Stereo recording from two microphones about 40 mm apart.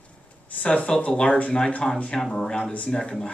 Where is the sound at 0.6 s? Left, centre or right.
Left.